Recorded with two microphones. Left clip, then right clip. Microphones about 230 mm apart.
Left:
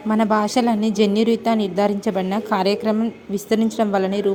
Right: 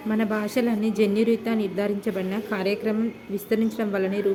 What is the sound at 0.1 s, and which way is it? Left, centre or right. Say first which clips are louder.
Speech: left 8 dB; left.